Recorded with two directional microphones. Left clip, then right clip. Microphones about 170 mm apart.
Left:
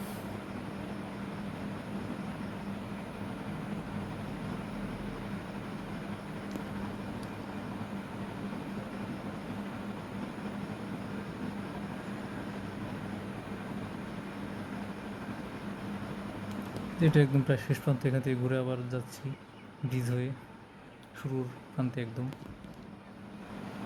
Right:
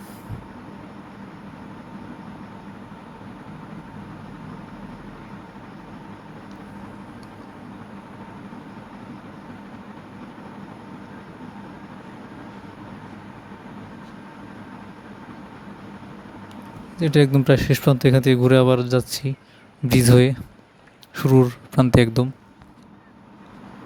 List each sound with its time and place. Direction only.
17.0 s speech: 65° right (ahead or behind); by 22.2 s 85° right